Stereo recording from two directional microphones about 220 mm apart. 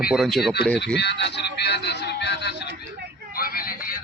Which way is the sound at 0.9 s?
50° left (ahead or behind).